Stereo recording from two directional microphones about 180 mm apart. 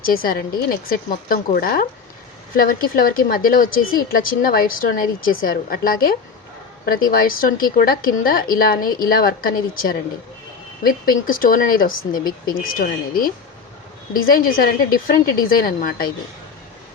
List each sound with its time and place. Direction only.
0.0 s speech: 55° left (ahead or behind)